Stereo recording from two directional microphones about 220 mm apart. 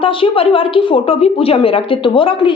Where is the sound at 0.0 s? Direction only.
25° left (ahead or behind).